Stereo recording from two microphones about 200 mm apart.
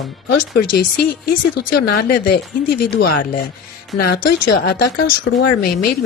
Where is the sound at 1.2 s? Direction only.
50° left (ahead or behind).